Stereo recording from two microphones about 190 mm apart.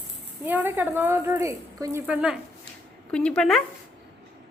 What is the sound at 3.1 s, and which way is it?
Speech, 5° left (ahead or behind).